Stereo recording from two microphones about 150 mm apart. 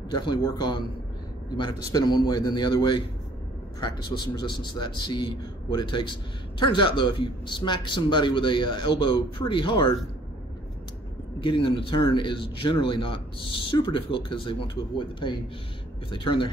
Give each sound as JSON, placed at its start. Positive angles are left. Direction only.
{"t": 0.1, "sound": "a man's voice", "side_deg": 30}
{"t": 11.4, "sound": "speech", "side_deg": 35}